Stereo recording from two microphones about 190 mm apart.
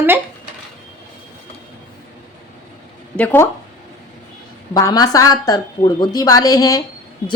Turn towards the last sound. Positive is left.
turn(degrees=20)  # may be behind; listen again after turning